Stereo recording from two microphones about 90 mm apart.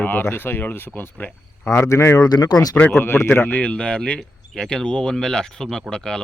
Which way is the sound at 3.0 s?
25° left (ahead or behind).